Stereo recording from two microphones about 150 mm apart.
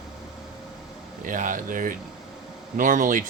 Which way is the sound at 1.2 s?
60° right (ahead or behind).